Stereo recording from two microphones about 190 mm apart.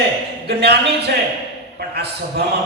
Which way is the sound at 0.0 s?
60° right (ahead or behind).